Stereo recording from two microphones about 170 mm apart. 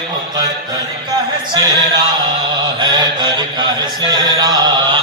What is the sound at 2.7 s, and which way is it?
Mantra, 25° right (ahead or behind).